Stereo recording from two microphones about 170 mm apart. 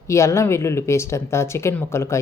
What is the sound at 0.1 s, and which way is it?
Speech, 15° left (ahead or behind).